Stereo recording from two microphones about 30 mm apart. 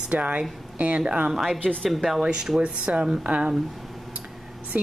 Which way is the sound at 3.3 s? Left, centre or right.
Right.